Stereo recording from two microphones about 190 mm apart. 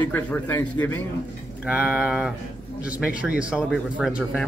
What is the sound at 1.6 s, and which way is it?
Speech, 5° right (ahead or behind).